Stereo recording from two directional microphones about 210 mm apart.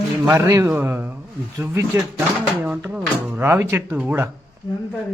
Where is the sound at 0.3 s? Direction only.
15° right (ahead or behind).